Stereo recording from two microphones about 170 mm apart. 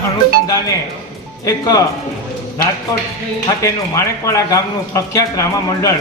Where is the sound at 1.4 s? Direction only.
20° left (ahead or behind).